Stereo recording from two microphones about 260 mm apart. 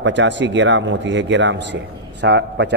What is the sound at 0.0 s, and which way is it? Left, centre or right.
Speech, right.